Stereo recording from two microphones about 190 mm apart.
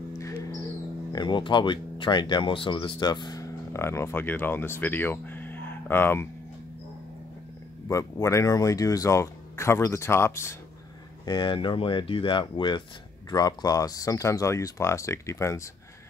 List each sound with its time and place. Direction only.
0.2 s music: 15° left (ahead or behind)
1.1 s speech: 25° left (ahead or behind)
7.9 s speech: 15° left (ahead or behind)